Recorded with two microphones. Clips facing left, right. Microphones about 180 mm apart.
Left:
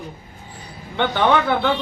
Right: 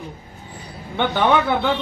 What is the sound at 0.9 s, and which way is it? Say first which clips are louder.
Speech: even; 10° right (ahead or behind).